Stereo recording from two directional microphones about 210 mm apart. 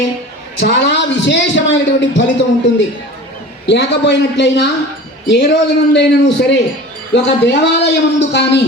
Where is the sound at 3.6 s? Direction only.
55° left (ahead or behind).